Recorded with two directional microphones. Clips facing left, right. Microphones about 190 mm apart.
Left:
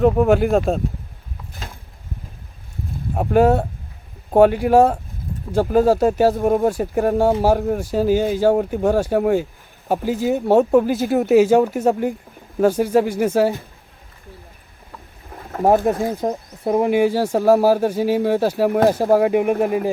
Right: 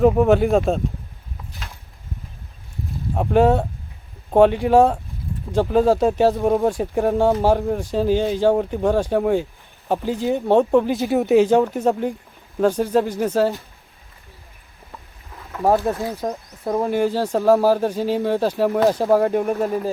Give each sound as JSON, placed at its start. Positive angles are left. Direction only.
{"t": 0.0, "sound": "speech", "side_deg": 0}
{"t": 3.2, "sound": "speech", "side_deg": 5}
{"t": 15.6, "sound": "speech", "side_deg": 15}